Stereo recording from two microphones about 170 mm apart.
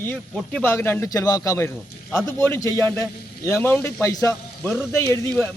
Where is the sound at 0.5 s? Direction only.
15° left (ahead or behind).